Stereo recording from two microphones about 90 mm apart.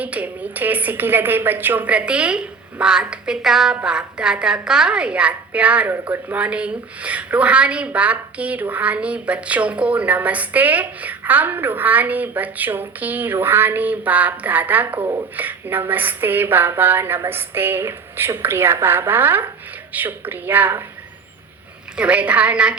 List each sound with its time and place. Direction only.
0.0 s a woman's voice: 15° right (ahead or behind)
21.9 s a woman's voice: 15° right (ahead or behind)